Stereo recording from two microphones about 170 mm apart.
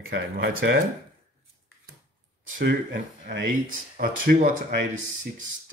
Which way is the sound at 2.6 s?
70° right (ahead or behind).